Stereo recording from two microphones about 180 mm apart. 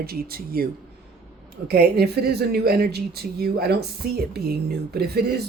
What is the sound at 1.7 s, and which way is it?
A woman's voice, 60° right (ahead or behind).